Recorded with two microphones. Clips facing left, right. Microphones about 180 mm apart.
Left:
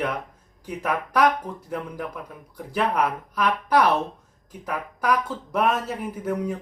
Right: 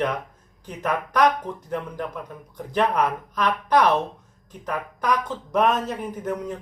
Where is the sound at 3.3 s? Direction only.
10° left (ahead or behind).